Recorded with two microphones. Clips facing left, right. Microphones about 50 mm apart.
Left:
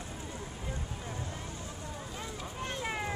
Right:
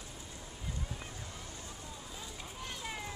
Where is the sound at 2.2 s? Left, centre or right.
Left.